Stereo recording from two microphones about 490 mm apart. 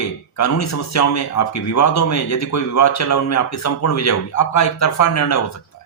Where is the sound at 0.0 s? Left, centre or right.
Left.